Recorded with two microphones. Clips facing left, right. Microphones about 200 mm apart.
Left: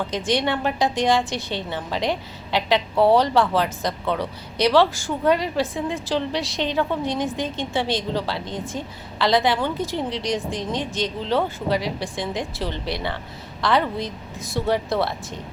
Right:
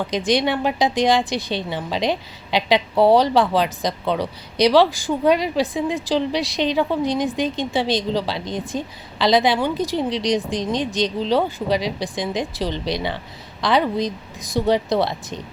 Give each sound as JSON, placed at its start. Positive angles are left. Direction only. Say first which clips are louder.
{"t": 0.1, "sound": "a woman's voice", "louder": "right 4 dB", "side_deg": -15}